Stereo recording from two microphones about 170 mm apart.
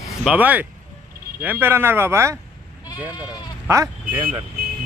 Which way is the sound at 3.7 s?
15° right (ahead or behind).